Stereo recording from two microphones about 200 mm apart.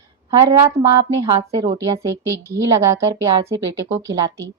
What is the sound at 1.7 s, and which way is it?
A woman's voice, 15° right (ahead or behind).